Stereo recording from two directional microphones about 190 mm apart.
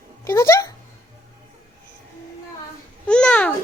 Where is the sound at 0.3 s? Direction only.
15° left (ahead or behind).